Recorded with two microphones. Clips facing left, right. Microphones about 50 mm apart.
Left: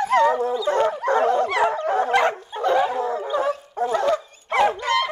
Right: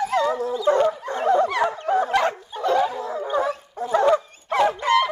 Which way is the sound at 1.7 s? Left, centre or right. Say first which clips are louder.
Even; left.